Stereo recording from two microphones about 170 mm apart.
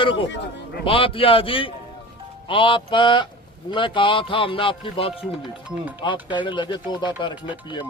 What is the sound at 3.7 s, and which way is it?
A man's voice, 30° left (ahead or behind).